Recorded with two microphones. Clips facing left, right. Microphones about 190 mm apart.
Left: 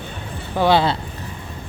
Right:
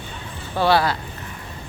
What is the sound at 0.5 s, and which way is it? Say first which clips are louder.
Speech: left 2 dB; 20° left (ahead or behind).